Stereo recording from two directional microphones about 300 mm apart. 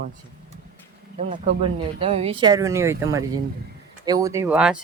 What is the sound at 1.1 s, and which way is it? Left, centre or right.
Speech, right.